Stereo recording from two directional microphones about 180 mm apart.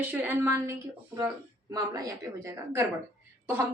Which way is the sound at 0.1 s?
10° right (ahead or behind).